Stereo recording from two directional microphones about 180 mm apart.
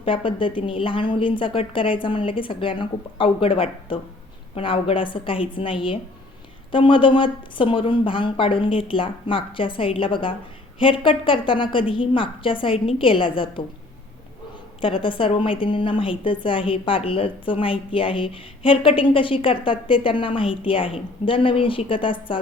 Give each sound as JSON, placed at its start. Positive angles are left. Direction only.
{"t": 0.0, "sound": "a woman's voice", "side_deg": 30}
{"t": 14.8, "sound": "a woman's voice", "side_deg": 30}